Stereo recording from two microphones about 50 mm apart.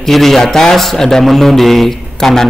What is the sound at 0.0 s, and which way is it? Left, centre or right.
A man's voice, centre.